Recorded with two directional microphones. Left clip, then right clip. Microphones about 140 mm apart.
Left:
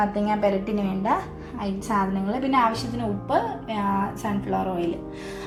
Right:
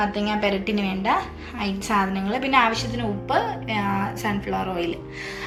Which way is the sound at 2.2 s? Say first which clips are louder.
Right 2 dB; 40° left (ahead or behind).